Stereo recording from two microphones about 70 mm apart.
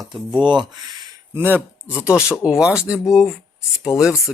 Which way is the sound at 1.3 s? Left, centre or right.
Right.